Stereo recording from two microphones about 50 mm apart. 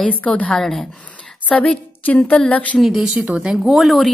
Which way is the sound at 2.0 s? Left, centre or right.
Left.